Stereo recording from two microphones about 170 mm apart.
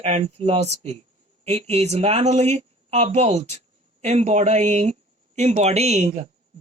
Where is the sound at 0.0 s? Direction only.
40° right (ahead or behind).